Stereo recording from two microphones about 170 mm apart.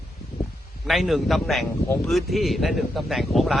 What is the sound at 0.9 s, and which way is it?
A man's voice, centre (ahead or behind).